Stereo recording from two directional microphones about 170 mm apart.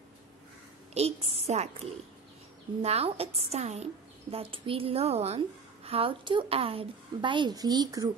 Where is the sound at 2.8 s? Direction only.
35° right (ahead or behind).